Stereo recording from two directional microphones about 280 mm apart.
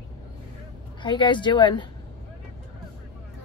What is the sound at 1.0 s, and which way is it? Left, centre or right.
Speech, centre.